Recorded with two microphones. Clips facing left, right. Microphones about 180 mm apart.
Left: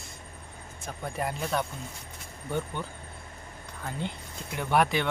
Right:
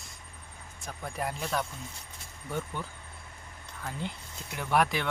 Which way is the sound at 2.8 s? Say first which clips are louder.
Left 3 dB; centre (ahead or behind).